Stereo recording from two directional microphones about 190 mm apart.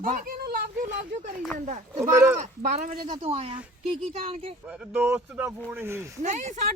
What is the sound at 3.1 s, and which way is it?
Speech, 30° right (ahead or behind).